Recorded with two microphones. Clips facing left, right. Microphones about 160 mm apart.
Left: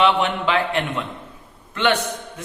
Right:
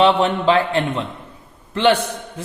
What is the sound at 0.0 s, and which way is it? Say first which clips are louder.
A man's voice: right 4 dB; 35° right (ahead or behind).